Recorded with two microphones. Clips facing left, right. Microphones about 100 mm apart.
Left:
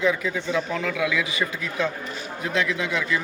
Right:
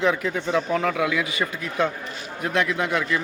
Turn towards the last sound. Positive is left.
turn(degrees=-55)  # may be behind; listen again after turning